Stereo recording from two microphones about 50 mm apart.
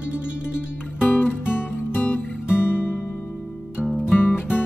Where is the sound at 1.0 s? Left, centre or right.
Left.